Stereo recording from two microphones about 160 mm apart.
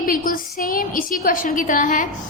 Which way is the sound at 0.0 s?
60° left (ahead or behind).